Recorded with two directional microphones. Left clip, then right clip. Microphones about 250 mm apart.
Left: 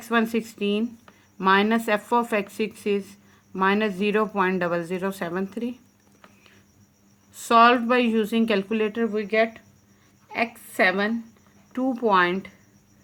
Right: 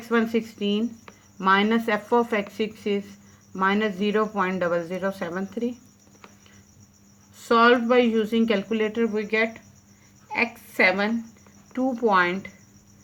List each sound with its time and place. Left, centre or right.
0.0 s speech: left
7.3 s a woman's voice: left